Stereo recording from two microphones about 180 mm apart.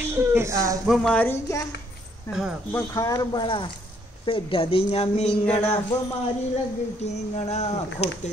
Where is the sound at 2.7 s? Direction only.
15° left (ahead or behind); by 5.3 s 35° left (ahead or behind).